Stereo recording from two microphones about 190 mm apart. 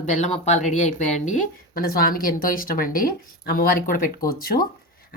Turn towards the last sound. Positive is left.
turn(degrees=50)  # may be behind; listen again after turning